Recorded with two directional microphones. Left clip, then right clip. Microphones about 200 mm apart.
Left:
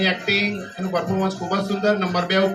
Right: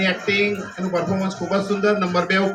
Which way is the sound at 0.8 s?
20° right (ahead or behind).